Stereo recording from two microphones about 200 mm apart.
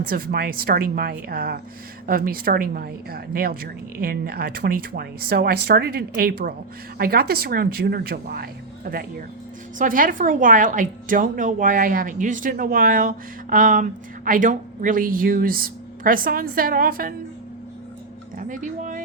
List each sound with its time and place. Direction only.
0.0 s a woman's voice: 45° right (ahead or behind)
18.3 s speech: 40° right (ahead or behind)